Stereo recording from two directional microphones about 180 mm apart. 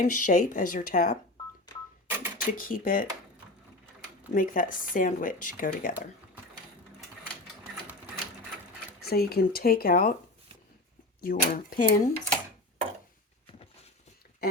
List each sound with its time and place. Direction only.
0.0 s speech: 50° left (ahead or behind)
2.0 s a sound: 10° right (ahead or behind)
2.4 s speech: 50° left (ahead or behind)
4.3 s speech: 50° left (ahead or behind)
9.0 s speech: 60° left (ahead or behind)
11.2 s speech: 55° left (ahead or behind)
13.5 s a sound: 35° left (ahead or behind)